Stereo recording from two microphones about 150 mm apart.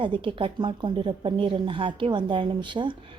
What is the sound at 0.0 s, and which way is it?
A woman's voice, 35° right (ahead or behind).